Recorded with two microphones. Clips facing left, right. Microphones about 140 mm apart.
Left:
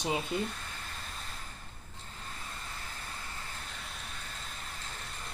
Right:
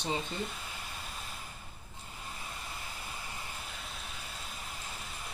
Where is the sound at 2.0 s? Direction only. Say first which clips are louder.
Right 1 dB; 10° right (ahead or behind).